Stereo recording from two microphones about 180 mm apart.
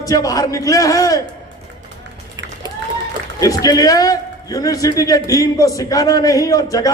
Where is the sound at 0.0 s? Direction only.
20° left (ahead or behind).